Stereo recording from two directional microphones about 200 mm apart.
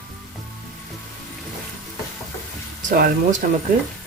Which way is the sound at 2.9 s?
45° right (ahead or behind).